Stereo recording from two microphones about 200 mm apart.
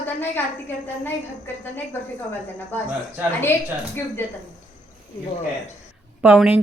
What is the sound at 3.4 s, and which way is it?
Speech, 10° left (ahead or behind).